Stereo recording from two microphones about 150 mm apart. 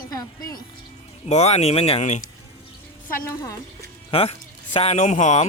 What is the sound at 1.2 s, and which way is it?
Speech, 45° left (ahead or behind).